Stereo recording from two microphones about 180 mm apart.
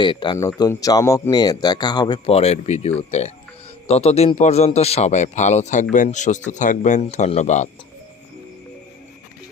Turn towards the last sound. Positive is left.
turn(degrees=40)  # may be behind; listen again after turning